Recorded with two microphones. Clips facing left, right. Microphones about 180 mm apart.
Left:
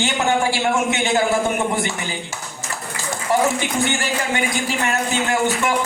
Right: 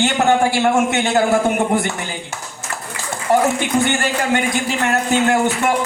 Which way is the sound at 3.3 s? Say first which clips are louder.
Right 3 dB; 55° right (ahead or behind).